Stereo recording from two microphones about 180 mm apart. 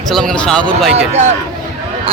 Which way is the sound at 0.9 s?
40° right (ahead or behind).